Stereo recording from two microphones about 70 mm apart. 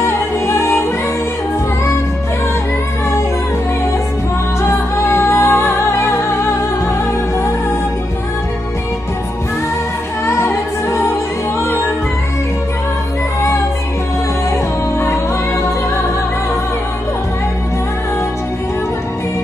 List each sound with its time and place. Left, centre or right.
0.0 s music: left
4.6 s music: left
10.2 s a capella: left